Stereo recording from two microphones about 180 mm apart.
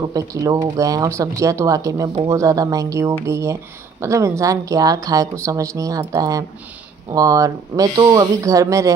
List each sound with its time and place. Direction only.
0.1 s speech: 20° right (ahead or behind)